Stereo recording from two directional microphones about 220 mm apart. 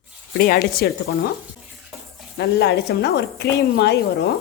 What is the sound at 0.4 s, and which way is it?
Speech, 45° left (ahead or behind).